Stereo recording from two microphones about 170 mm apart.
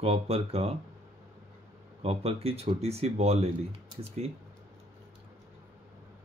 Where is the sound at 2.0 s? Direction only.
35° right (ahead or behind).